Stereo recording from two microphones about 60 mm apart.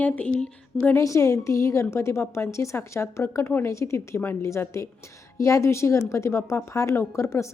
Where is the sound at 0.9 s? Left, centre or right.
Left.